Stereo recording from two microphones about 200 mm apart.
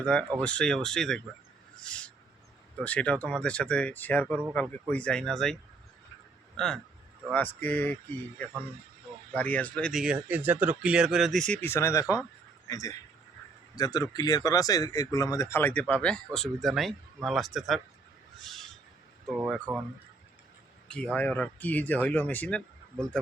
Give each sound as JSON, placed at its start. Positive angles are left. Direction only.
{"t": 0.0, "sound": "speech", "side_deg": 5}
{"t": 1.8, "sound": "owl", "side_deg": 5}
{"t": 2.8, "sound": "speech", "side_deg": 5}
{"t": 6.6, "sound": "speech", "side_deg": 0}
{"t": 9.3, "sound": "speech", "side_deg": 10}
{"t": 18.3, "sound": "owl", "side_deg": 0}
{"t": 19.7, "sound": "speech", "side_deg": -10}
{"t": 20.8, "sound": "speech", "side_deg": 5}